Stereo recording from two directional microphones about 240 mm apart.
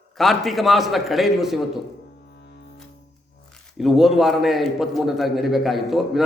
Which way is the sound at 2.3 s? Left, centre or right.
Left.